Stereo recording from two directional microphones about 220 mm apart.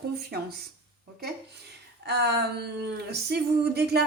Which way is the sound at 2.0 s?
50° right (ahead or behind).